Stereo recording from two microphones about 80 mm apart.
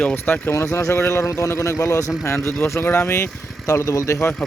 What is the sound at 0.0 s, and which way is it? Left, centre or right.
Speech, centre.